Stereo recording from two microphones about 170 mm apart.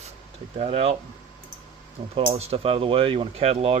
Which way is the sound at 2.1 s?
35° right (ahead or behind).